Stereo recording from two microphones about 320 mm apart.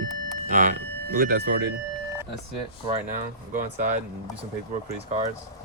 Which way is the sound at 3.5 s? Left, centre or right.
Right.